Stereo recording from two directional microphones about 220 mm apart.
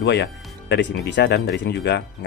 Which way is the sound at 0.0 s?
50° left (ahead or behind).